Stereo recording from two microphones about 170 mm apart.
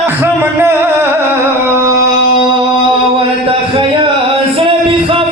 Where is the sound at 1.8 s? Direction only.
20° right (ahead or behind).